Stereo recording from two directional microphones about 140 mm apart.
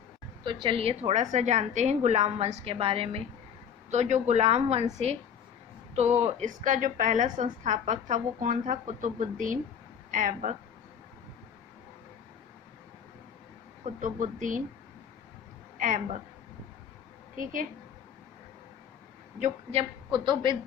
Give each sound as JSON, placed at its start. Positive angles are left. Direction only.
{"t": 0.4, "sound": "a woman's voice", "side_deg": -40}
{"t": 3.9, "sound": "a woman's voice", "side_deg": -55}
{"t": 6.0, "sound": "a woman's voice", "side_deg": -55}
{"t": 13.8, "sound": "a woman's voice", "side_deg": -60}
{"t": 15.8, "sound": "speech", "side_deg": -65}
{"t": 17.3, "sound": "speech", "side_deg": -75}
{"t": 19.8, "sound": "a woman's voice", "side_deg": -35}